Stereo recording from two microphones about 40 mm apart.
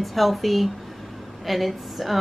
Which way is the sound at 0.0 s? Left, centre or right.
Centre.